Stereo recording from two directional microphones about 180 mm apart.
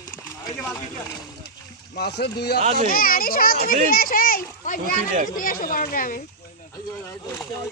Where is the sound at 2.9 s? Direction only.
55° left (ahead or behind).